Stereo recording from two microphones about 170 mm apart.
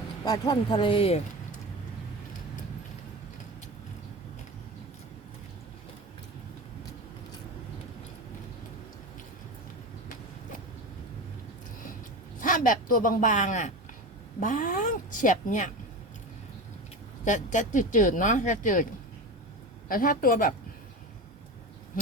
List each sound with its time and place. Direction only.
0.3 s speech: 25° left (ahead or behind)
12.4 s speech: 50° left (ahead or behind)
17.2 s speech: 45° left (ahead or behind)
19.9 s a woman's voice: 55° left (ahead or behind)